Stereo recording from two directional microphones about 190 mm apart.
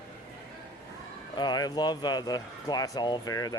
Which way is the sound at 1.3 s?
20° left (ahead or behind).